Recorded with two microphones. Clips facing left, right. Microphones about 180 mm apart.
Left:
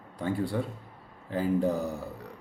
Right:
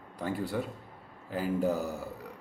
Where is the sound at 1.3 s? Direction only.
5° right (ahead or behind).